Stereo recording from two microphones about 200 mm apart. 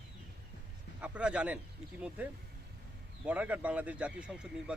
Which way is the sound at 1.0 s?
5° right (ahead or behind).